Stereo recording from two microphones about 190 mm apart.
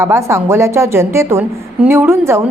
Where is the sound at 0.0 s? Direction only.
15° right (ahead or behind).